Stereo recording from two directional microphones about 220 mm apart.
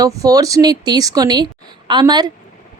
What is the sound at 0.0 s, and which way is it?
A woman's voice, 15° right (ahead or behind).